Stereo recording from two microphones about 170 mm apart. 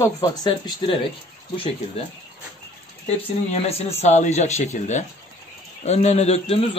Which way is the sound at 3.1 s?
40° left (ahead or behind).